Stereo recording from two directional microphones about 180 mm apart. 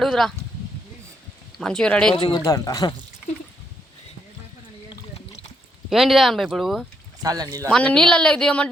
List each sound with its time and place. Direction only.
0.0 s speech: centre (ahead or behind)
1.5 s a woman's voice: 5° left (ahead or behind)
2.1 s a man's voice: 20° left (ahead or behind)
5.9 s a woman's voice: centre (ahead or behind)
7.2 s speech: 20° right (ahead or behind)
7.7 s a woman's voice: 5° left (ahead or behind)